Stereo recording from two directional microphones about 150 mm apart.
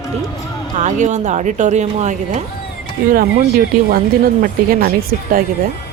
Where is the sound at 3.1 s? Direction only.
75° right (ahead or behind).